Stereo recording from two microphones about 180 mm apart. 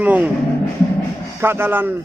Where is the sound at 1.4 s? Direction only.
10° right (ahead or behind).